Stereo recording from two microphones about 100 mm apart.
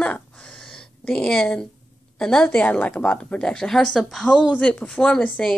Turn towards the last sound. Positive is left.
turn(degrees=10)  # may be behind; listen again after turning